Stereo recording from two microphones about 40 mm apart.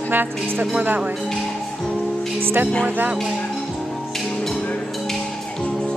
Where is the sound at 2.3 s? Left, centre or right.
Right.